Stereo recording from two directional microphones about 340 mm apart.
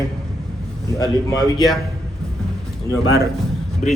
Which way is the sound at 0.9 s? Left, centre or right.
Centre.